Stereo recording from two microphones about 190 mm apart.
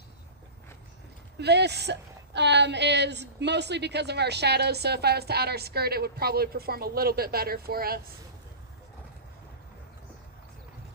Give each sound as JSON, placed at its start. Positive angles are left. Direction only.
{"t": 1.4, "sound": "speech", "side_deg": -60}